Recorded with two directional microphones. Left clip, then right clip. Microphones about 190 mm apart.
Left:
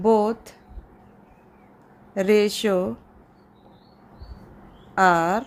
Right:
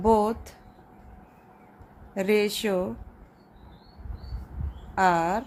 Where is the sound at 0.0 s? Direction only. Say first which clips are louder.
Left 3 dB; 10° left (ahead or behind).